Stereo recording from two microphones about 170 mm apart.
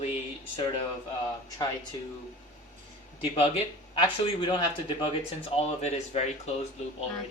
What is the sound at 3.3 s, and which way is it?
Speech, 35° left (ahead or behind).